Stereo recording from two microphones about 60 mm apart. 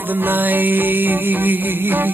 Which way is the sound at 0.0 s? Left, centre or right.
Right.